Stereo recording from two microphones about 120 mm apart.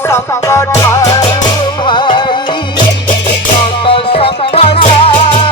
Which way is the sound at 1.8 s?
40° left (ahead or behind).